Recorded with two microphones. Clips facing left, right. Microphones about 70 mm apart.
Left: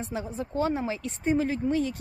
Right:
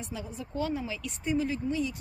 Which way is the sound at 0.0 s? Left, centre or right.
Left.